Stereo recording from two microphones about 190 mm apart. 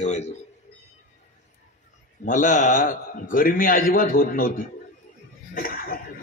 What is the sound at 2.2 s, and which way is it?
Speech, 40° left (ahead or behind).